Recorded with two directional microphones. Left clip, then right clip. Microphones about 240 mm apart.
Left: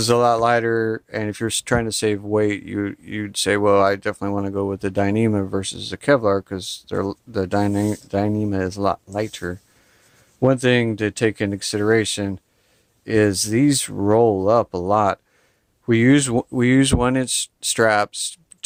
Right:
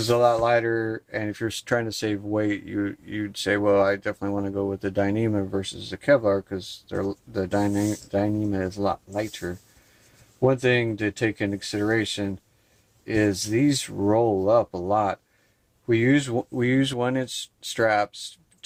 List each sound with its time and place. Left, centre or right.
0.0 s speech: left